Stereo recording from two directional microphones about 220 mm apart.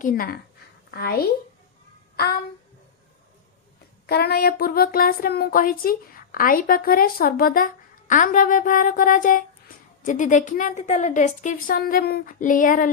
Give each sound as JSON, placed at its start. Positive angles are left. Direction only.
{"t": 0.0, "sound": "speech", "side_deg": 40}
{"t": 4.0, "sound": "speech", "side_deg": 45}